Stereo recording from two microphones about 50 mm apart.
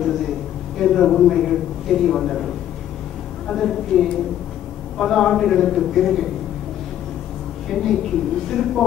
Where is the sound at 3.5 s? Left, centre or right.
Centre.